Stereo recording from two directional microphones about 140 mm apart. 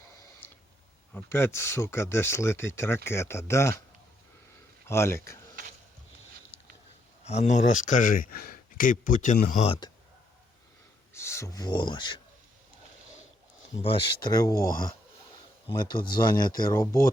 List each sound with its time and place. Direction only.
0.4 s tick: 15° left (ahead or behind)
1.1 s speech: 15° left (ahead or behind)
4.9 s speech: 20° left (ahead or behind)
7.3 s speech: 55° left (ahead or behind)
9.6 s speech: 40° left (ahead or behind)
11.1 s speech: 20° left (ahead or behind); by 12.2 s 35° left (ahead or behind)
13.7 s speech: 40° left (ahead or behind); by 14.9 s 25° left (ahead or behind)
16.1 s speech: 30° left (ahead or behind)